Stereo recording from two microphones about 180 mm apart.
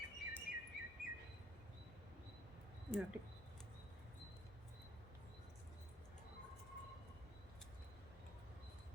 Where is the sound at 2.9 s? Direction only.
10° right (ahead or behind).